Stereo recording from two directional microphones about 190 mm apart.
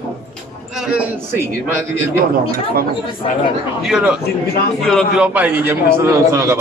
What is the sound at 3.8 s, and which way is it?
A man's voice, 5° right (ahead or behind).